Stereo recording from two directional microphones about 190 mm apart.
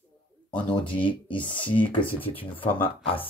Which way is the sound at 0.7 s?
25° left (ahead or behind).